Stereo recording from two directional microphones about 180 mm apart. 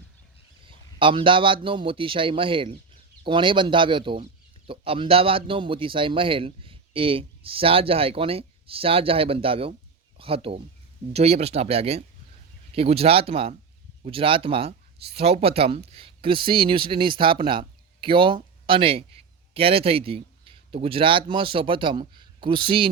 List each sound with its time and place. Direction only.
0.7 s a man's voice: 30° right (ahead or behind)